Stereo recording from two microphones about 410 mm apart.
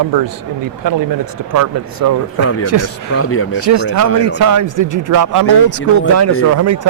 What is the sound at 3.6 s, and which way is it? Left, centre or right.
Speech, right.